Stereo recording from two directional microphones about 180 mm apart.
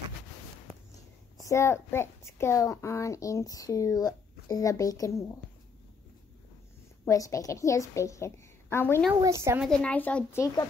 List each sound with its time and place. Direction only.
1.4 s a child's voice: 15° left (ahead or behind)
7.1 s a child's voice: 20° left (ahead or behind)
9.1 s a woman's voice: 20° right (ahead or behind)
9.6 s a child's voice: 5° left (ahead or behind)